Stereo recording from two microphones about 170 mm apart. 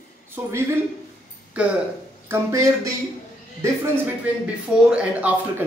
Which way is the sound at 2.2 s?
20° right (ahead or behind).